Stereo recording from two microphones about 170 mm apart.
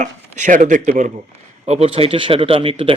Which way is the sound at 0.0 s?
45° right (ahead or behind).